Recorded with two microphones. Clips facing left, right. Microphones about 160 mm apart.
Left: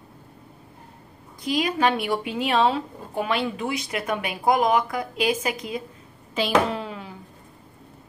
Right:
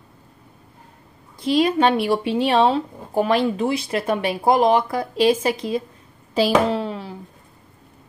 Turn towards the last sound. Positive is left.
turn(degrees=-30)  # may be behind; listen again after turning